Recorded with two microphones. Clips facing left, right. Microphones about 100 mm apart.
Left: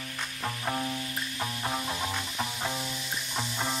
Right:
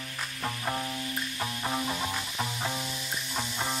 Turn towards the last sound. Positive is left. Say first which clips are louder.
# even
turn(degrees=0)  # may be behind; listen again after turning